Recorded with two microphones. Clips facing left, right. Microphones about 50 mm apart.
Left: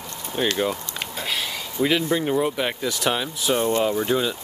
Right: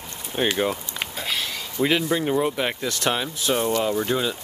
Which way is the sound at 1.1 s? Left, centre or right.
Centre.